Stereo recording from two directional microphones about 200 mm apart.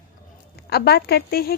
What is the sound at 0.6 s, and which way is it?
Speech, 55° left (ahead or behind).